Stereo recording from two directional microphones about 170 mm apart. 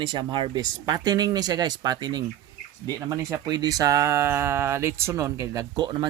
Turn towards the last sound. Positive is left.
turn(degrees=-25)  # may be behind; listen again after turning